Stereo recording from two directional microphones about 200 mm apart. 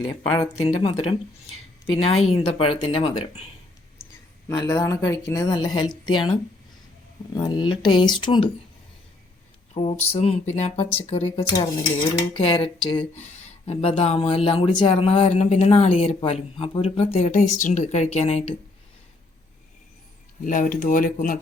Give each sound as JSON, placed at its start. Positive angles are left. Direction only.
{"t": 0.0, "sound": "speech", "side_deg": 25}
{"t": 4.4, "sound": "a woman's voice", "side_deg": 15}
{"t": 9.7, "sound": "speech", "side_deg": 25}
{"t": 20.4, "sound": "speech", "side_deg": 40}